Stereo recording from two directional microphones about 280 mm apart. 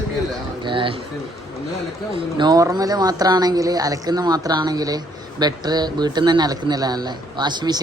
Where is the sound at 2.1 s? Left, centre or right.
Centre.